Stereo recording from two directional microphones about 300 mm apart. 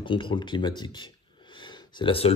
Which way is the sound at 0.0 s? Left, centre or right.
Centre.